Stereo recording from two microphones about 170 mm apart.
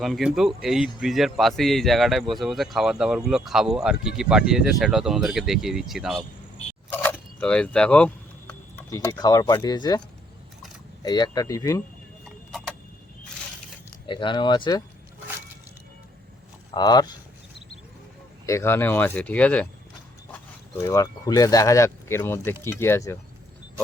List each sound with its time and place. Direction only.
0.0 s speech: centre (ahead or behind)
6.9 s speech: 10° left (ahead or behind)
11.0 s speech: 25° left (ahead or behind)
12.5 s tick-tock: centre (ahead or behind)
14.1 s speech: 30° left (ahead or behind)
16.7 s speech: 25° left (ahead or behind)
18.4 s speech: 15° left (ahead or behind)
20.8 s speech: 20° left (ahead or behind)